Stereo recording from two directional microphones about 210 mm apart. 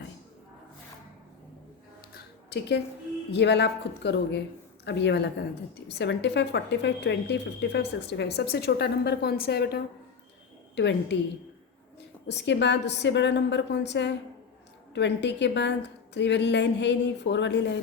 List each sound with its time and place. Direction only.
2.1 s a sound: 55° left (ahead or behind)
3.3 s a woman's voice: 55° left (ahead or behind)
12.3 s a woman's voice: 55° left (ahead or behind)